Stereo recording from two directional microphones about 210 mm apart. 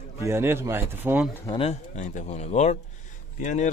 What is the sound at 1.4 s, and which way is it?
A man's voice, 25° left (ahead or behind).